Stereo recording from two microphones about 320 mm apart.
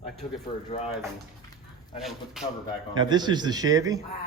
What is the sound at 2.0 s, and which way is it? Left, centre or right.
Speech, centre.